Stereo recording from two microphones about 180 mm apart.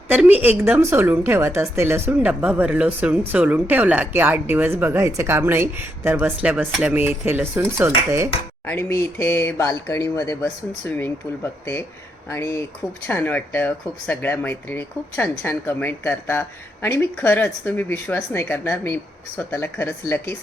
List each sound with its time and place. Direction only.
0.1 s a woman's voice: 10° right (ahead or behind)
8.6 s speech: 15° left (ahead or behind)